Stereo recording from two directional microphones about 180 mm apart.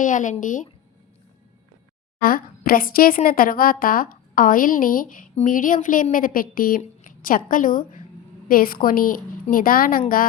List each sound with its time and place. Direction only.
0.0 s a woman's voice: 45° left (ahead or behind)
2.2 s a woman's voice: 55° left (ahead or behind)